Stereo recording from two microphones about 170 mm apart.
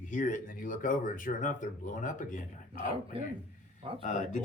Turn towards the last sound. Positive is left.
turn(degrees=45)  # may be behind; listen again after turning